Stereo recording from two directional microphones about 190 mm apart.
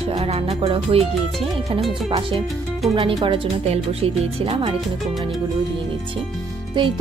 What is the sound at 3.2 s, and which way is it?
Speech, 30° right (ahead or behind).